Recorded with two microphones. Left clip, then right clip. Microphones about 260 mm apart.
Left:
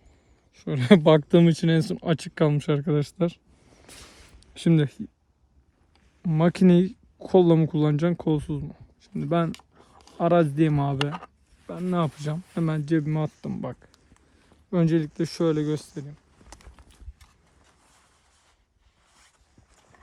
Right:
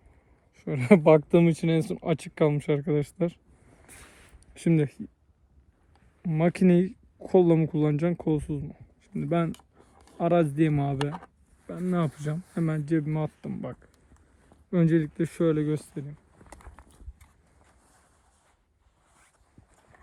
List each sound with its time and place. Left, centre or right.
0.6 s speech: left
4.5 s speech: left
6.2 s speech: left
13.9 s a sound: centre
15.0 s speech: centre
15.4 s speech: left
16.5 s a sound: centre